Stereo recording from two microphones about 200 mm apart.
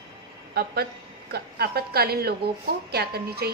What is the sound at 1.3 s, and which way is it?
A woman's voice, 50° right (ahead or behind).